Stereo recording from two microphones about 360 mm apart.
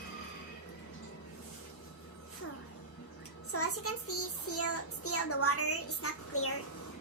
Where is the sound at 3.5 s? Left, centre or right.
Left.